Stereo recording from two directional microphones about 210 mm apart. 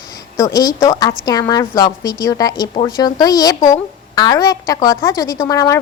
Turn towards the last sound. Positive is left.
turn(degrees=15)  # may be behind; listen again after turning